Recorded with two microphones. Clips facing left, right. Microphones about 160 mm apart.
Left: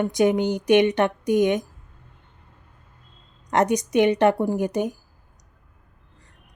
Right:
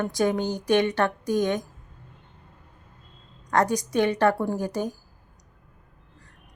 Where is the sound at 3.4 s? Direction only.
20° left (ahead or behind).